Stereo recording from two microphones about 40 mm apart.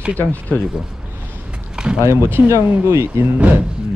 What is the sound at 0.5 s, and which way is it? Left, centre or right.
Speech, left.